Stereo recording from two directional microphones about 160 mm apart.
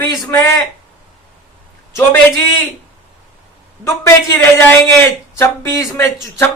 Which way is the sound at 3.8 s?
15° left (ahead or behind).